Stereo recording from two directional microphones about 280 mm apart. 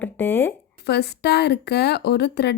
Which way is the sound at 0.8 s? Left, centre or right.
Left.